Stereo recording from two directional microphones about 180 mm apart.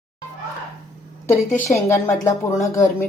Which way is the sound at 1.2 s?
10° left (ahead or behind).